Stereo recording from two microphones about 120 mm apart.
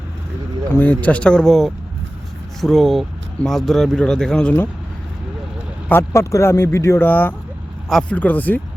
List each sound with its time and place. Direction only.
0.8 s speech: 15° left (ahead or behind)
5.9 s speech: 20° left (ahead or behind)